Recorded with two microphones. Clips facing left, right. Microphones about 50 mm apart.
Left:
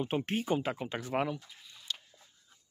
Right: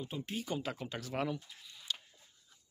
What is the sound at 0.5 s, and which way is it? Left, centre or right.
Speech, left.